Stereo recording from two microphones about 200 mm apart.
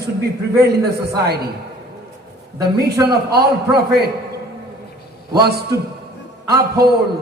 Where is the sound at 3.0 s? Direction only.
50° right (ahead or behind).